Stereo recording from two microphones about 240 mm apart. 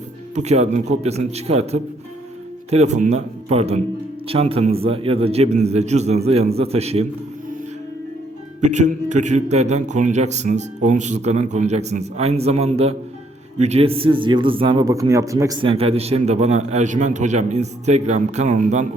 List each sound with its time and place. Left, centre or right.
0.3 s a man's voice: right
8.6 s a man's voice: right